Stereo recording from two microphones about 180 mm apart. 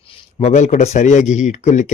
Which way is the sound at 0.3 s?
40° left (ahead or behind).